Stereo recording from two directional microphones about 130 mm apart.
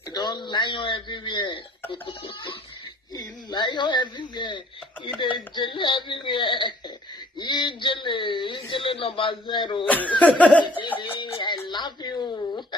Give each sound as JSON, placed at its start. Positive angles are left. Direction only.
{"t": 0.1, "sound": "a man's voice", "side_deg": 35}
{"t": 9.8, "sound": "speech", "side_deg": 10}
{"t": 11.1, "sound": "a sound", "side_deg": 35}